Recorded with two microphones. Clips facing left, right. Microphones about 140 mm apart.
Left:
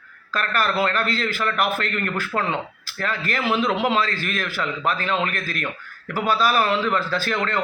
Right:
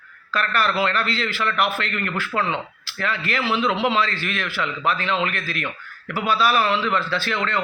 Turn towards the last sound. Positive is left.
turn(degrees=45)  # may be behind; listen again after turning